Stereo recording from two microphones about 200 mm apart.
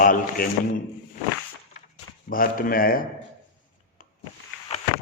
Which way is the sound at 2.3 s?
45° left (ahead or behind).